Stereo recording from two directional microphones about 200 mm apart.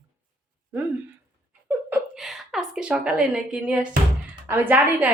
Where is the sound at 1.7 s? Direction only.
10° right (ahead or behind).